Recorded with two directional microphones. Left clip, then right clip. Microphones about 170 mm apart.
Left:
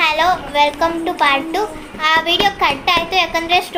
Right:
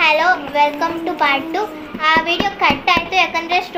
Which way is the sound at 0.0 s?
20° left (ahead or behind).